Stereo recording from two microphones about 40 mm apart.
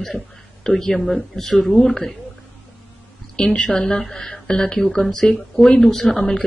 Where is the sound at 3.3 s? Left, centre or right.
Centre.